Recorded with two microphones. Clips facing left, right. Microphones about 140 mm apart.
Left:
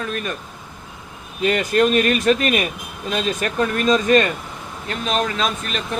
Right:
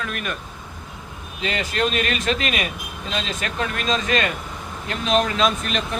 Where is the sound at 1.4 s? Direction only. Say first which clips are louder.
Left 7 dB; 50° left (ahead or behind).